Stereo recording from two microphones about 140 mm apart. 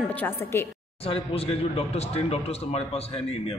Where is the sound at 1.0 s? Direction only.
45° left (ahead or behind).